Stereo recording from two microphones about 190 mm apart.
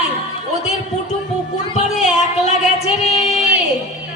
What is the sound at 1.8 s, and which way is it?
Music, 40° left (ahead or behind).